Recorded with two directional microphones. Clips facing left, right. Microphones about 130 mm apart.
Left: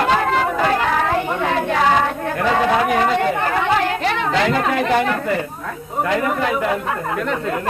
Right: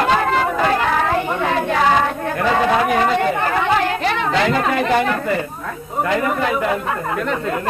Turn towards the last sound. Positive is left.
turn(degrees=-25)  # may be behind; listen again after turning